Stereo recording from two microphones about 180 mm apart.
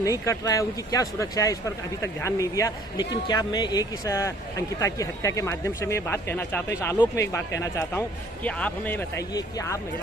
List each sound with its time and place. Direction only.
0.0 s speech: 15° left (ahead or behind)